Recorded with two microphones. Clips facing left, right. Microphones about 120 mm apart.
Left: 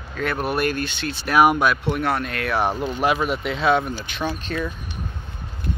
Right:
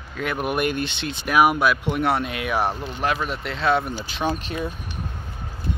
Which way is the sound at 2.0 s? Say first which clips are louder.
Right 1 dB; 25° right (ahead or behind).